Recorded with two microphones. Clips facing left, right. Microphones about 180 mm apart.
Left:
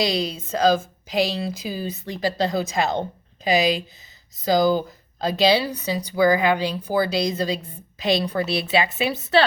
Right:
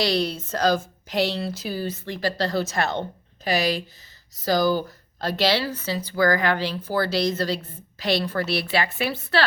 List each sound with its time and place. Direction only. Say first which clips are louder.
0.0 s a woman's voice: even; 10° left (ahead or behind)